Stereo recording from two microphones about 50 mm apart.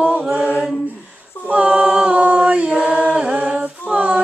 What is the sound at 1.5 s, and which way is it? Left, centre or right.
A capella, right.